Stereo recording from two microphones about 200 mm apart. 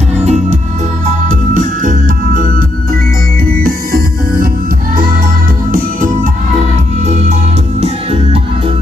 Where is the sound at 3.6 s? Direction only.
45° right (ahead or behind).